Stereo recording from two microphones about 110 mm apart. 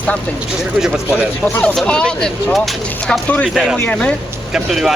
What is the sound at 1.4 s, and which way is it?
Speech, 15° left (ahead or behind).